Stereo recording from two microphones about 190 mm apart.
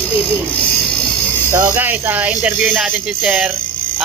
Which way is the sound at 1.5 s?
10° right (ahead or behind).